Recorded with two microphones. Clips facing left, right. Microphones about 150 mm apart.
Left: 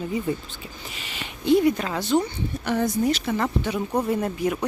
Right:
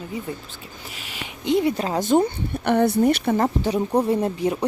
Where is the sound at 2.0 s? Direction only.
50° right (ahead or behind).